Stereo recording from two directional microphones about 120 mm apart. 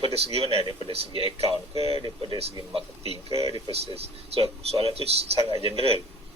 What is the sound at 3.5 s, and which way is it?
Speech, 55° left (ahead or behind).